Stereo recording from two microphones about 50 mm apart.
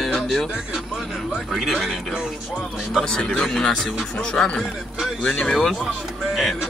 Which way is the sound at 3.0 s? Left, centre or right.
Centre.